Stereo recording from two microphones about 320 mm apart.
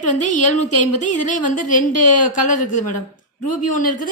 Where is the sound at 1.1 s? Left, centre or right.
Left.